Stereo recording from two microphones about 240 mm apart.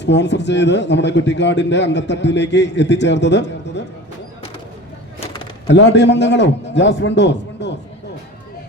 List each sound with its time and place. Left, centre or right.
0.0 s a man's voice: left
5.6 s a man's voice: left